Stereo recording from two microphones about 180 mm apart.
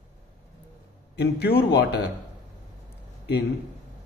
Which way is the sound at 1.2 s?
65° left (ahead or behind).